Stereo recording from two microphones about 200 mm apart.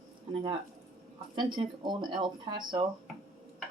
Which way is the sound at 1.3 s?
25° right (ahead or behind).